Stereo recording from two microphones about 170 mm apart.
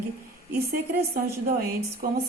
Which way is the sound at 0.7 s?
60° right (ahead or behind).